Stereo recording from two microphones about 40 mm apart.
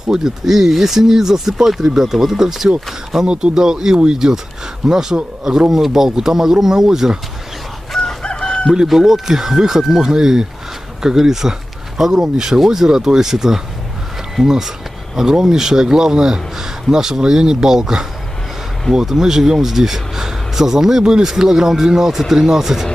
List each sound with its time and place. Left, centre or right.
0.1 s speech: centre
3.3 s speech: right
3.5 s speech: centre
7.9 s chicken: centre
8.2 s chicken: left
8.8 s speech: centre
15.1 s speech: centre